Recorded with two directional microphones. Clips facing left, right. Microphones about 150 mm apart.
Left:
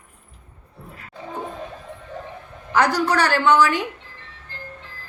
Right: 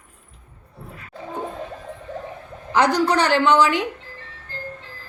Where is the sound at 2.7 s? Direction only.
20° right (ahead or behind).